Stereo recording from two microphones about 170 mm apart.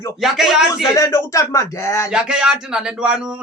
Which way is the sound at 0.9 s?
20° left (ahead or behind).